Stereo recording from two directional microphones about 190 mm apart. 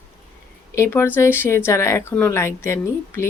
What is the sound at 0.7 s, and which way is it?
Speech, 15° left (ahead or behind).